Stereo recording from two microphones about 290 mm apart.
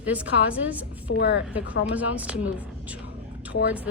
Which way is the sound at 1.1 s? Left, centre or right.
Left.